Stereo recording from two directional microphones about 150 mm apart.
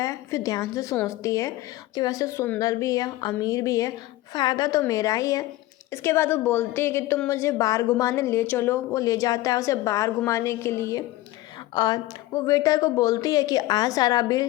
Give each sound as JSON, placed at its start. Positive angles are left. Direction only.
{"t": 0.0, "sound": "a woman's voice", "side_deg": 20}